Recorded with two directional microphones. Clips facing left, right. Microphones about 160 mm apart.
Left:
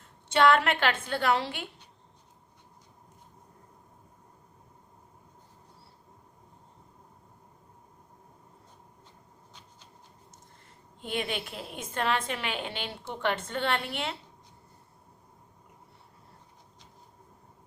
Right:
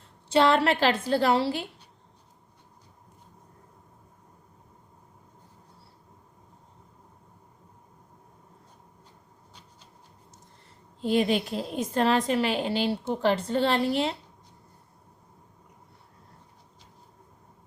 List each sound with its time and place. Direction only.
0.3 s a woman's voice: 30° right (ahead or behind)
11.0 s a woman's voice: 35° right (ahead or behind)